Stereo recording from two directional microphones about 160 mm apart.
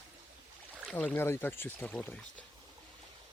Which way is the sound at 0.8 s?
Centre (ahead or behind).